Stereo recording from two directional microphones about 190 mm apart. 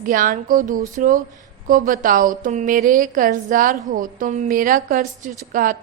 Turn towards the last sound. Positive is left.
turn(degrees=-45)  # may be behind; listen again after turning